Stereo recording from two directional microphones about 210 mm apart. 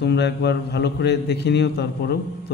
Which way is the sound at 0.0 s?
55° left (ahead or behind).